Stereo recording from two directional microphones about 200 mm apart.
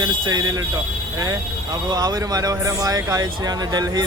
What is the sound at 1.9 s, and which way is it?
Speech, 20° right (ahead or behind).